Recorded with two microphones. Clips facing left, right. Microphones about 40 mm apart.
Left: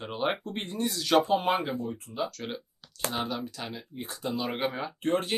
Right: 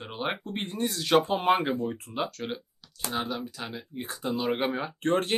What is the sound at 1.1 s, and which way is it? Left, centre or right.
Speech, right.